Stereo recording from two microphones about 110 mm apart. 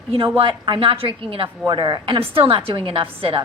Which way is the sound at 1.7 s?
40° right (ahead or behind).